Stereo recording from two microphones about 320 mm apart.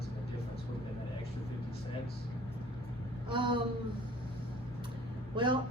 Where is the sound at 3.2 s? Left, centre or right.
Centre.